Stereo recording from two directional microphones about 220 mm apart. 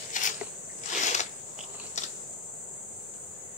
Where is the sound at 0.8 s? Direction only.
35° left (ahead or behind).